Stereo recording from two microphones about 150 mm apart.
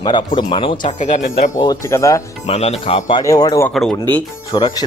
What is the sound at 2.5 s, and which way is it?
Speech, 45° left (ahead or behind).